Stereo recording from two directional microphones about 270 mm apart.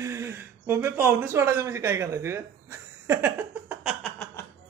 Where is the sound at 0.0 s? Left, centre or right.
Centre.